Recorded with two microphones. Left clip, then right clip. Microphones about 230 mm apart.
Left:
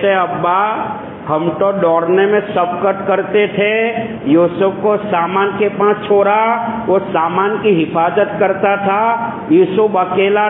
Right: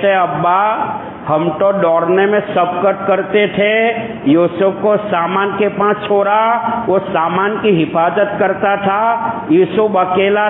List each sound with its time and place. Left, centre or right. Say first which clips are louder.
0.0 s a man's voice: right 1 dB; right